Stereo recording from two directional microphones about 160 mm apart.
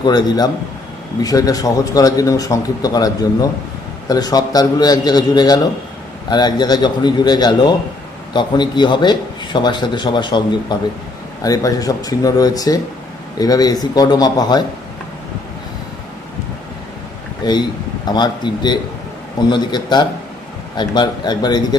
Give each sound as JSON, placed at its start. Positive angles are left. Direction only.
{"t": 0.0, "sound": "a man's voice", "side_deg": 25}
{"t": 17.4, "sound": "a man's voice", "side_deg": 25}